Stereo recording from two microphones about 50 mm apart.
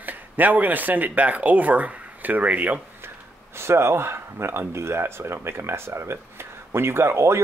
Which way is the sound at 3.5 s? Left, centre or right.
Right.